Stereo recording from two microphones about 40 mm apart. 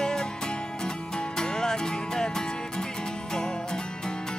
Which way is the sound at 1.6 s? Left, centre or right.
Centre.